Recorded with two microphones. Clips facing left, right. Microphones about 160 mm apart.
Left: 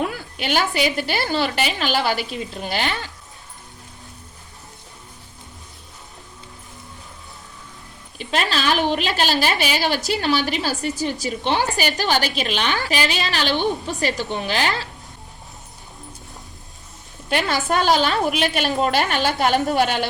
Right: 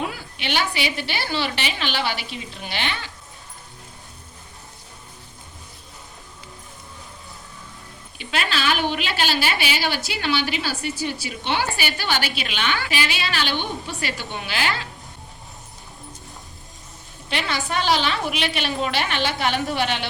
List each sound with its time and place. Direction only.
0.3 s a woman's voice: 45° left (ahead or behind)
8.2 s a woman's voice: 40° left (ahead or behind)
17.2 s a woman's voice: 45° left (ahead or behind)